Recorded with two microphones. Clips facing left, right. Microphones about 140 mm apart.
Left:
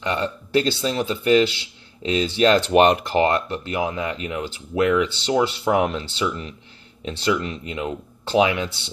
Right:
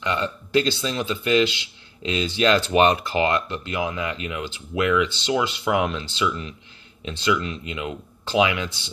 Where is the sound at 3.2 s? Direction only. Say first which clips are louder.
Left 2 dB; 30° left (ahead or behind).